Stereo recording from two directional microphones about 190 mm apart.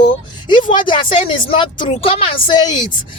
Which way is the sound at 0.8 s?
25° left (ahead or behind).